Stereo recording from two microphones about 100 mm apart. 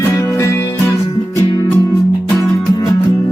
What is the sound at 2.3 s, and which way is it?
Music, 35° left (ahead or behind).